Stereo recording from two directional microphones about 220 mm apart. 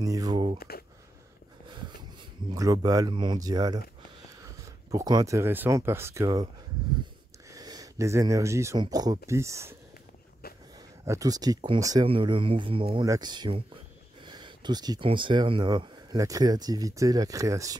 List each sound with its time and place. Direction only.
0.0 s speech: 15° right (ahead or behind)
0.6 s a sound: 45° left (ahead or behind)
1.7 s a sound: 20° right (ahead or behind)
2.5 s speech: 15° right (ahead or behind)
4.9 s speech: 15° right (ahead or behind)
7.5 s speech: 15° right (ahead or behind)
11.1 s speech: 15° right (ahead or behind)